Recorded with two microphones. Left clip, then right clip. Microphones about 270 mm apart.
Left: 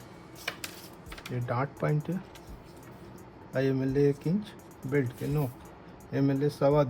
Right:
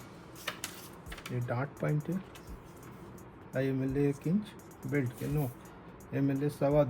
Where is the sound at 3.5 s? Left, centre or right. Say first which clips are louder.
Left 5 dB; left.